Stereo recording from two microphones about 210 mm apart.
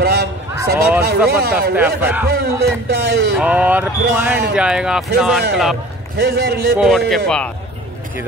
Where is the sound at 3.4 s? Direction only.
5° right (ahead or behind).